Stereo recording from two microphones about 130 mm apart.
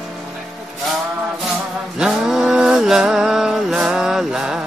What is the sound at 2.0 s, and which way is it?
Mantra, 5° right (ahead or behind).